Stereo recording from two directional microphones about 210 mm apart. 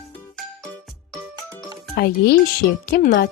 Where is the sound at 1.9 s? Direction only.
45° left (ahead or behind).